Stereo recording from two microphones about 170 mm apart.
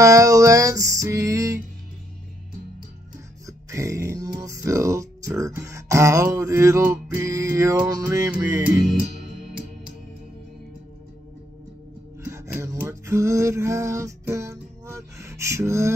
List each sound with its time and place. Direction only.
0.0 s music: 20° right (ahead or behind)
3.4 s music: 20° right (ahead or behind)
12.2 s a sound: 15° right (ahead or behind)